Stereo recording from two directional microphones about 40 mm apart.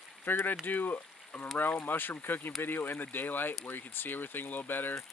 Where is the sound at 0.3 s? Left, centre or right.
Left.